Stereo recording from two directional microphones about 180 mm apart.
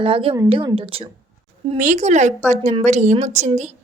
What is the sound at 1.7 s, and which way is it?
Speech, 45° right (ahead or behind).